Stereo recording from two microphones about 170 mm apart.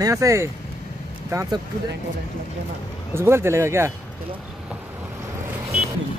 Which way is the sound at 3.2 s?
15° right (ahead or behind).